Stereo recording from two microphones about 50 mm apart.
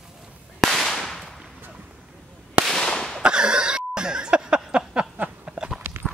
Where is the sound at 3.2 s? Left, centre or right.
Centre.